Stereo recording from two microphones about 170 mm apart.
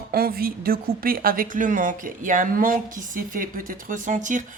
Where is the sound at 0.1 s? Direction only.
60° right (ahead or behind).